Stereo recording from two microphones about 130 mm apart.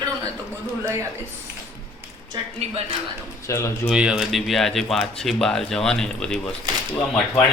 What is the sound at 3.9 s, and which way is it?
Speech, 5° right (ahead or behind).